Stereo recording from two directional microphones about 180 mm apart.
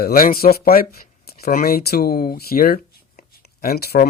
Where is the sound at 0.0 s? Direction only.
55° left (ahead or behind).